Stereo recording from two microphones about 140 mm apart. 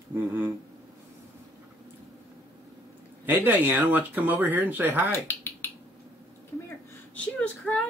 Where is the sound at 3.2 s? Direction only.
15° right (ahead or behind).